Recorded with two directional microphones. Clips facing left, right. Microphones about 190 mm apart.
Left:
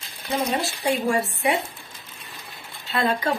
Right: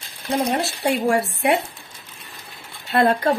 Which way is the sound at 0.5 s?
65° right (ahead or behind).